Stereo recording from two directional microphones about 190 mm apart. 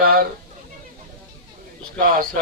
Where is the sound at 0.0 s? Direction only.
50° right (ahead or behind).